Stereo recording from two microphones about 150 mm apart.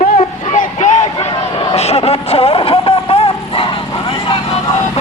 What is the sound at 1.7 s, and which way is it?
Vehicle, 45° left (ahead or behind).